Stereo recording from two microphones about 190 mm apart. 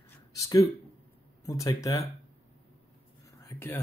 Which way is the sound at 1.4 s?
15° left (ahead or behind).